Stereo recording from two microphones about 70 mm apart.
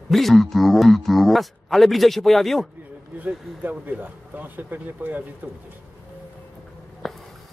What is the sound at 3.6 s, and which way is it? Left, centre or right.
Speech, right.